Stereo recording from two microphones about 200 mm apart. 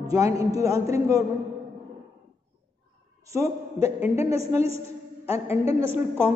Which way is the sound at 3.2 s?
15° right (ahead or behind).